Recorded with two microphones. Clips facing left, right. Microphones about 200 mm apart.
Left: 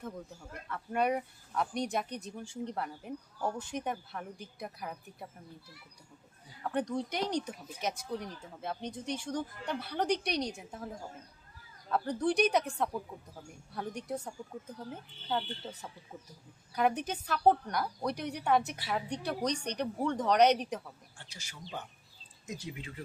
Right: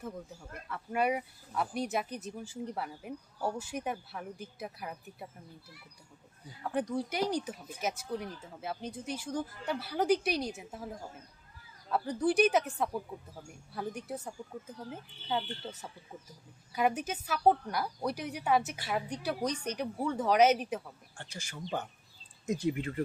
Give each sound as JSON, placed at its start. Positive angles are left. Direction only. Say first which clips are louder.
{"t": 0.7, "sound": "speech", "louder": "even", "side_deg": -5}
{"t": 6.6, "sound": "speech", "louder": "even", "side_deg": -5}
{"t": 21.2, "sound": "speech", "louder": "right 7 dB", "side_deg": -50}